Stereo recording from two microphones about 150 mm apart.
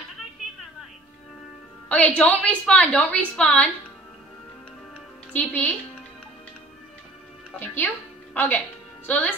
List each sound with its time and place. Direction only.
1.9 s a woman's voice: 10° left (ahead or behind)
5.3 s a woman's voice: 10° left (ahead or behind)
7.5 s a woman's voice: 15° left (ahead or behind)
9.0 s speech: 10° left (ahead or behind)